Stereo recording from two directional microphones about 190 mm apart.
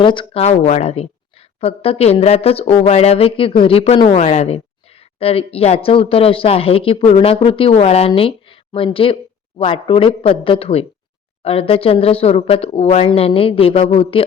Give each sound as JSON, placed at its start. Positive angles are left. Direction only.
{"t": 0.0, "sound": "a woman's voice", "side_deg": 25}